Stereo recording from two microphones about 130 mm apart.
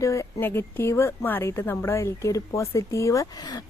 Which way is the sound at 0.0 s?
25° left (ahead or behind).